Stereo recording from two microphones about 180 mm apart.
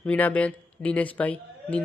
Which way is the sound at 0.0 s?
10° left (ahead or behind).